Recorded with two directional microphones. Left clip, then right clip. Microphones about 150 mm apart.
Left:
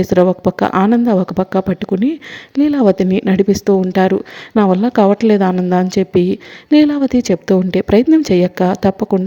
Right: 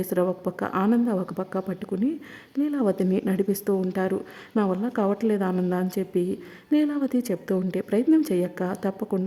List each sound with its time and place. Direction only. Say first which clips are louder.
0.0 s a woman's voice: left 13 dB; 35° left (ahead or behind)